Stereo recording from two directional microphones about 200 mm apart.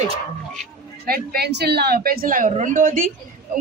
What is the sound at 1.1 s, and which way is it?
A woman's voice, 50° right (ahead or behind).